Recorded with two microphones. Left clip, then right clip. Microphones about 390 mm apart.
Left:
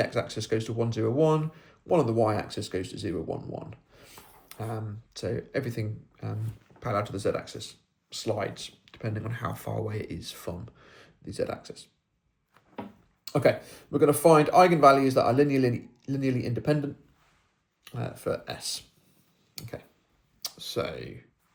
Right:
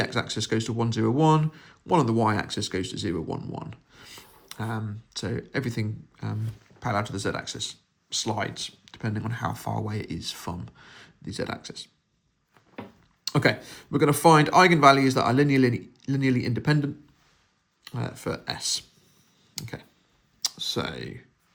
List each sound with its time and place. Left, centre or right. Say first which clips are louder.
0.0 s speech: right 1 dB; centre
13.2 s speech: even; centre
18.0 s speech: even; centre
19.5 s a sound: right 3 dB; centre
20.4 s speech: right 3 dB; centre